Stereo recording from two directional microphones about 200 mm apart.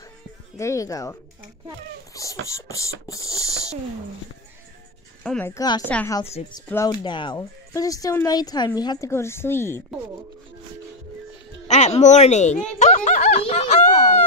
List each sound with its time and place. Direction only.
0.6 s speech: 15° left (ahead or behind)
2.4 s speech: 15° left (ahead or behind)
5.2 s speech: 5° left (ahead or behind)
6.4 s speech: 30° left (ahead or behind)
6.7 s speech: 15° left (ahead or behind)
11.6 s speech: 35° left (ahead or behind)
12.7 s snicker: 35° left (ahead or behind)